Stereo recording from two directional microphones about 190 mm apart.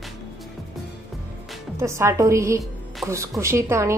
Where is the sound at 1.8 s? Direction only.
15° right (ahead or behind).